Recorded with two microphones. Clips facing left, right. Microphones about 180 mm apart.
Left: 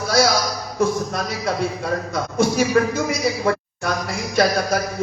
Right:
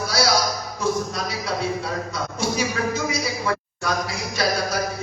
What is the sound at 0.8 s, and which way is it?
Speech, 55° left (ahead or behind).